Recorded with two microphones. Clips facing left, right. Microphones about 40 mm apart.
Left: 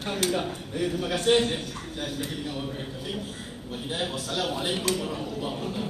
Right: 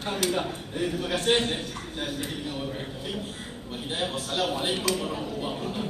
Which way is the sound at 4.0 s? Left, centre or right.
Centre.